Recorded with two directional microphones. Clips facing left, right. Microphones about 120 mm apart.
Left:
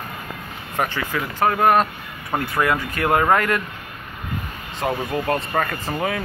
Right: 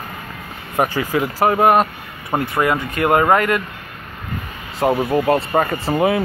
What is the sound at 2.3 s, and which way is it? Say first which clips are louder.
Speech: right 3 dB; 10° right (ahead or behind).